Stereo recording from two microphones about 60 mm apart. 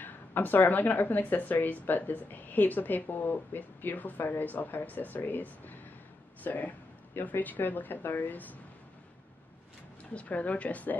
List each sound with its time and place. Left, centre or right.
0.0 s speech: left
10.1 s speech: left